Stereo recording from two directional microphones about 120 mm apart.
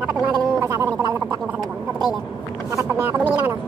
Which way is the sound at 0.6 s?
20° right (ahead or behind).